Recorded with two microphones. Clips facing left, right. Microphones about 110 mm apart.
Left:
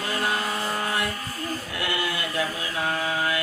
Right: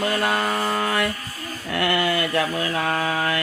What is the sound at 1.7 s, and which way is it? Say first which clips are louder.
Mantra: right 9 dB; 60° right (ahead or behind).